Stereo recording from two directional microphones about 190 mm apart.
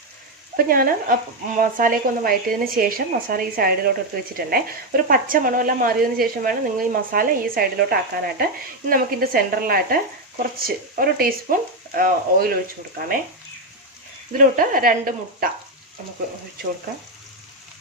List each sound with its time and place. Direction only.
0.5 s a woman's voice: 50° right (ahead or behind)
14.3 s a woman's voice: 45° right (ahead or behind)